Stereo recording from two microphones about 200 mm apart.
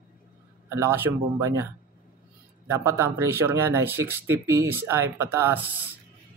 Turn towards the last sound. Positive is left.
turn(degrees=-10)  # may be behind; listen again after turning